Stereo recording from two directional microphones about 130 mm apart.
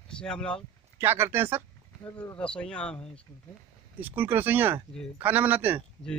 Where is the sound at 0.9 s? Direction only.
20° right (ahead or behind).